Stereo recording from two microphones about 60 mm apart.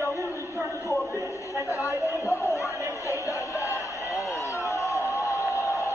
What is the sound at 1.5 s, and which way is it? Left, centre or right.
Chatter, left.